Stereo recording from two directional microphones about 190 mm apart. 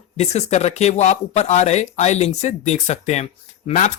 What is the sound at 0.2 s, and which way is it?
Speech, 35° left (ahead or behind).